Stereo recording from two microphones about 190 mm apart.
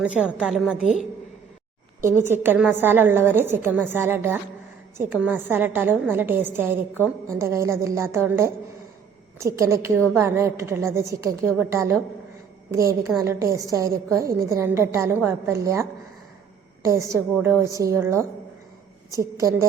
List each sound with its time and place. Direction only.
0.0 s a woman's voice: 5° right (ahead or behind)
2.0 s a woman's voice: 10° right (ahead or behind)